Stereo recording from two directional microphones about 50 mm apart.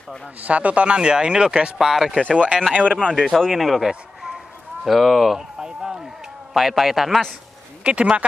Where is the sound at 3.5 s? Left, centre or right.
Centre.